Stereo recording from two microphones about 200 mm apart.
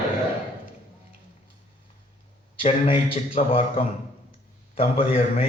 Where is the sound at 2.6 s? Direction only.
25° left (ahead or behind).